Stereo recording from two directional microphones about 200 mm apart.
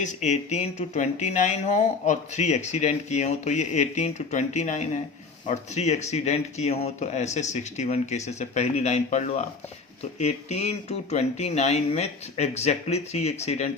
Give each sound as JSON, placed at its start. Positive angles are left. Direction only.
{"t": 0.0, "sound": "speech", "side_deg": 35}